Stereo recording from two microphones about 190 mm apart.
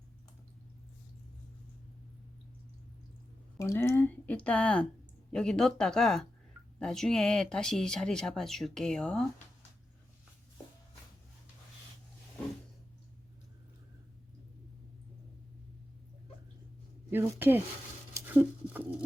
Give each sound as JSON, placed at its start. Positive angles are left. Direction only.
{"t": 3.6, "sound": "speech", "side_deg": 15}
{"t": 17.1, "sound": "speech", "side_deg": -10}
{"t": 18.3, "sound": "patter", "side_deg": -10}